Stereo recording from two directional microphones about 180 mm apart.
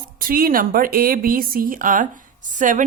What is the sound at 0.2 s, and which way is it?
A woman's voice, 50° right (ahead or behind).